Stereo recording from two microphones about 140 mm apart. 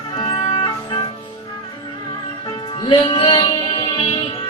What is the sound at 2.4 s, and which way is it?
Music, 30° left (ahead or behind).